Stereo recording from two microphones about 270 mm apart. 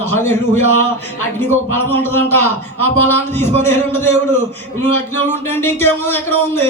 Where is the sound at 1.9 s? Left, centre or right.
Centre.